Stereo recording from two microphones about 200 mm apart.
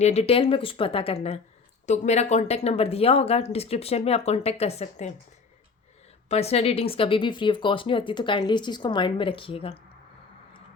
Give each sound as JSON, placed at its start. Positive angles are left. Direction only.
{"t": 0.0, "sound": "speech", "side_deg": 30}
{"t": 6.2, "sound": "speech", "side_deg": 30}